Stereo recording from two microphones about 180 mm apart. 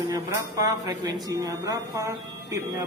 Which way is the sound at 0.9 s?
20° right (ahead or behind).